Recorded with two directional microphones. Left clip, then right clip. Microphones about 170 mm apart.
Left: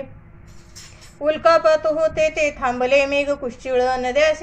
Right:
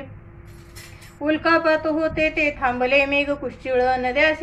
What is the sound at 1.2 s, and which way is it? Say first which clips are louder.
A woman's voice: left 4 dB; 45° left (ahead or behind).